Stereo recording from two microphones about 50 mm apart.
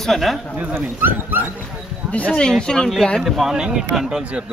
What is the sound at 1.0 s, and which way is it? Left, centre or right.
Speech, right.